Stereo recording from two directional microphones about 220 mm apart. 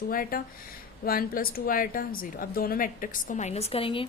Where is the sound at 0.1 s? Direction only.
40° left (ahead or behind).